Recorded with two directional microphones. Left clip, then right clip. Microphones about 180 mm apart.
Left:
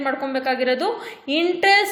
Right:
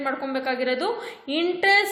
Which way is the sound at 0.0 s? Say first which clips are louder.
Left 4 dB; 15° left (ahead or behind).